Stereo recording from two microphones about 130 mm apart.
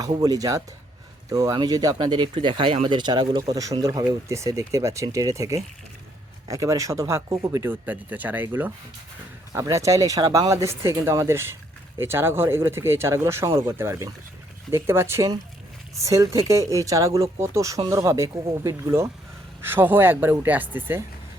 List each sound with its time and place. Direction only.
0.0 s speech: 30° right (ahead or behind); by 8.7 s 15° right (ahead or behind)
9.5 s speech: 25° right (ahead or behind)